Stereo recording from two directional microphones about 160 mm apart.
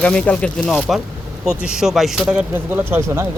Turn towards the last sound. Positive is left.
turn(degrees=-15)  # may be behind; listen again after turning